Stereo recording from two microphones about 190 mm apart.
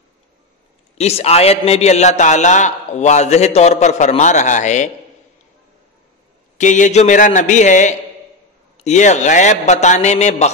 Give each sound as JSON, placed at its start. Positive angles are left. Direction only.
{"t": 0.9, "sound": "a man's voice", "side_deg": 35}
{"t": 6.6, "sound": "a man's voice", "side_deg": 40}